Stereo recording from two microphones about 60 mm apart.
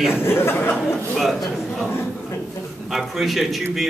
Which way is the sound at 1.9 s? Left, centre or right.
Left.